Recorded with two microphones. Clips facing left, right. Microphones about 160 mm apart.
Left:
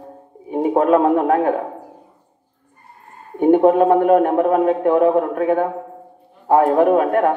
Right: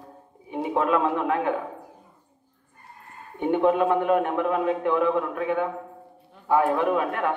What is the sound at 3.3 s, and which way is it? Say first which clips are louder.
A man's voice: left 9 dB; 45° left (ahead or behind).